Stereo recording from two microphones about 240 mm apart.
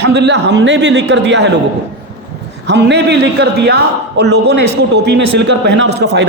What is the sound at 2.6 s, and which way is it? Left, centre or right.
A man's voice, right.